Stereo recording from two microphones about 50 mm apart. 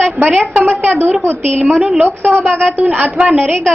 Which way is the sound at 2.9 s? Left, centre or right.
Right.